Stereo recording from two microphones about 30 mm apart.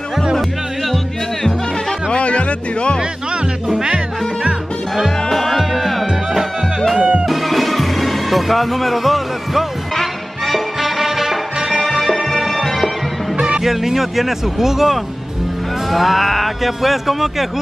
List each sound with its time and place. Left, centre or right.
0.1 s music: centre
0.4 s music: centre
2.0 s music: left
3.7 s music: right
5.3 s music: centre
5.6 s music: centre
7.0 s music: right
7.2 s music: centre
9.9 s music: centre
10.8 s music: centre
12.4 s music: centre
13.6 s speech: centre